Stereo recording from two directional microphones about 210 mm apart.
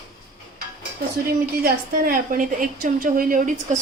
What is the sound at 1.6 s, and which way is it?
A woman's voice, 45° right (ahead or behind).